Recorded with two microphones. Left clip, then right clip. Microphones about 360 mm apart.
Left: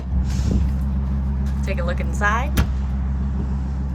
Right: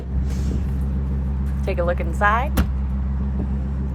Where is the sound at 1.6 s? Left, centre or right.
Centre.